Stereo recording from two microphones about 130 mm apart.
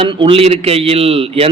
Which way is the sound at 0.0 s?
40° right (ahead or behind).